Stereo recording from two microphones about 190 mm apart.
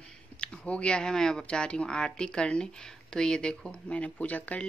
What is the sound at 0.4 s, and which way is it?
Speech, 5° left (ahead or behind).